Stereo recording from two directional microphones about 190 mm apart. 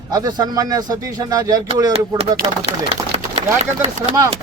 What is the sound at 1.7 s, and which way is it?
Speech, 30° right (ahead or behind).